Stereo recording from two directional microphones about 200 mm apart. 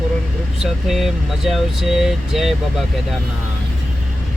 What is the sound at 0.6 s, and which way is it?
Speech, centre (ahead or behind).